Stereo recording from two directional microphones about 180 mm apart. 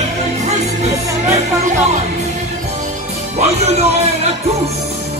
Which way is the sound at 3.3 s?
40° right (ahead or behind).